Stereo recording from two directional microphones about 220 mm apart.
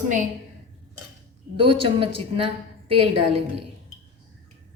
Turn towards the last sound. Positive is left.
turn(degrees=-25)  # may be behind; listen again after turning